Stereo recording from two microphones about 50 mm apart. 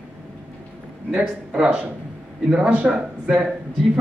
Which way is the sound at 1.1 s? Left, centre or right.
Right.